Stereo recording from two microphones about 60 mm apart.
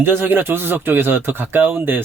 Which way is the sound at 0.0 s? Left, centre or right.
Right.